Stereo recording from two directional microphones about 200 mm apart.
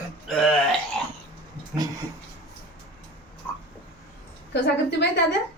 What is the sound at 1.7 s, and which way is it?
Speech, 20° right (ahead or behind).